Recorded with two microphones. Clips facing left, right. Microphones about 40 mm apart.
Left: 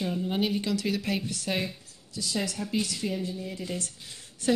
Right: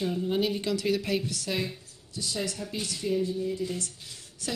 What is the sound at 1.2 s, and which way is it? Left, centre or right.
Speech, left.